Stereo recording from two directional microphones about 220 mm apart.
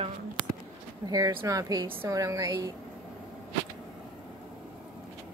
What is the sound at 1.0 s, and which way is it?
A woman's voice, 15° right (ahead or behind).